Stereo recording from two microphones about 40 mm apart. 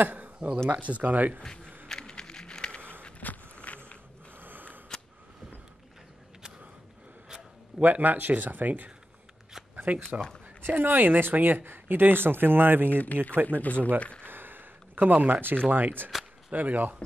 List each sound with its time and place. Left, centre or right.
0.0 s a sound: right
0.7 s speech: right
1.4 s speech: centre
1.9 s a sound: centre
3.2 s walk: left
4.4 s a sound: right
7.8 s speech: right
10.8 s speech: right
12.9 s speech: left
14.2 s a sound: right
15.7 s speech: right
16.5 s speech: right